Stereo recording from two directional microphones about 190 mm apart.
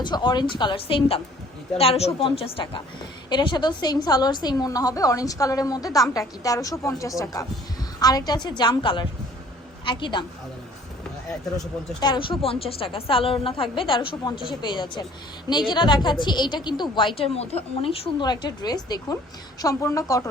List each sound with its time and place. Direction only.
0.0 s a woman's voice: 25° left (ahead or behind)
11.9 s a woman's voice: 20° left (ahead or behind)